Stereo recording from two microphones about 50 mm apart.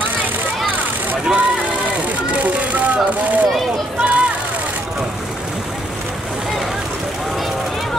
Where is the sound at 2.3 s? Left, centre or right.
Right.